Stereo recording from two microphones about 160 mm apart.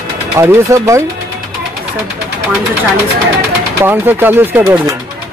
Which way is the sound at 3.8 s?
15° right (ahead or behind).